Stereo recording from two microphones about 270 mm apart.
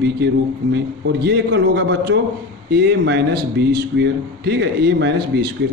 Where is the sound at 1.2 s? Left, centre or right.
Right.